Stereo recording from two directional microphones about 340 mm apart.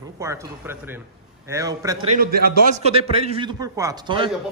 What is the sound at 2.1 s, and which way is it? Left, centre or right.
A man's voice, right.